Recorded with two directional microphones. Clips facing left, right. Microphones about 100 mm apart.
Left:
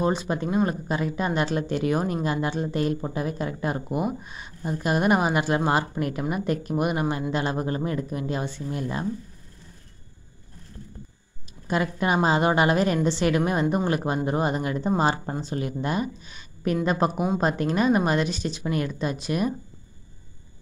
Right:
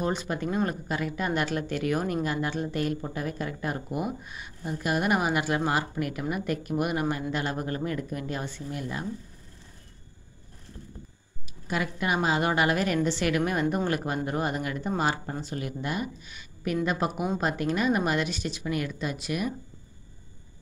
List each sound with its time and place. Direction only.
0.0 s a woman's voice: 20° left (ahead or behind)
11.6 s a woman's voice: 35° left (ahead or behind)